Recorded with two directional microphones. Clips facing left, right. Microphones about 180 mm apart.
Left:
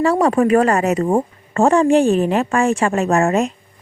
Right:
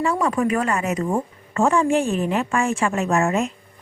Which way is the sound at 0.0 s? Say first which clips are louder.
Left 6 dB; 70° left (ahead or behind).